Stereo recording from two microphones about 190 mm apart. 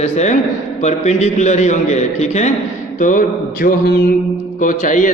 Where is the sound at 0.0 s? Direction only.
35° left (ahead or behind).